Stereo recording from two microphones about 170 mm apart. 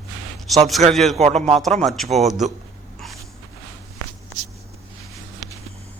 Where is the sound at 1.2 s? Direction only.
40° right (ahead or behind).